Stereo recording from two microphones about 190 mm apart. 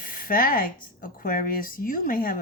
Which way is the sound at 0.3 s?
50° left (ahead or behind).